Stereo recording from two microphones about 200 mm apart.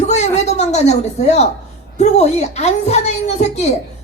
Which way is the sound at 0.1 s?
35° left (ahead or behind).